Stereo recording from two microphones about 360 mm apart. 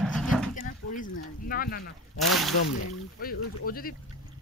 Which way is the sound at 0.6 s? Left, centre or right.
Left.